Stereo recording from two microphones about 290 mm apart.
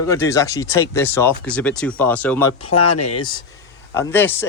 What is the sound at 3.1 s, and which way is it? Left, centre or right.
Speech, centre.